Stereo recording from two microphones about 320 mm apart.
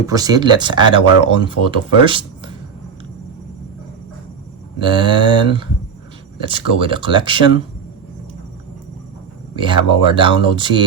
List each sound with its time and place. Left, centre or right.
0.0 s speech: centre
4.8 s speech: centre
9.6 s speech: centre